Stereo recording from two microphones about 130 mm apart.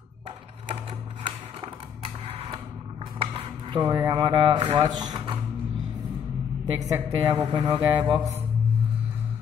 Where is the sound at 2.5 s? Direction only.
35° right (ahead or behind).